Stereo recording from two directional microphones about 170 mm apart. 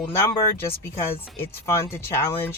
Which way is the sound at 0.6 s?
15° left (ahead or behind).